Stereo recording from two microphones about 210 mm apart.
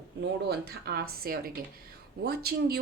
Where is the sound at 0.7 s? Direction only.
50° right (ahead or behind).